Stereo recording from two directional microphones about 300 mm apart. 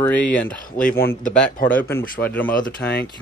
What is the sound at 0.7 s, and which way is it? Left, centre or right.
Speech, left.